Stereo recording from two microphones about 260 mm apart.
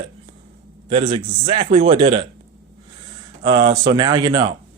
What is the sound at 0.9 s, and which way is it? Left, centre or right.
A man's voice, right.